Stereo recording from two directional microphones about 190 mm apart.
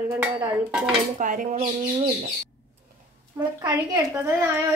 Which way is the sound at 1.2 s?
40° right (ahead or behind).